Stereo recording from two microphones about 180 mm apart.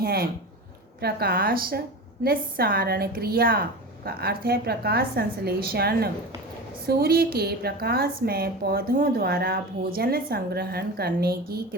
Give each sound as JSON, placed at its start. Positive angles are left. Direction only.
{"t": 0.0, "sound": "a woman's voice", "side_deg": -55}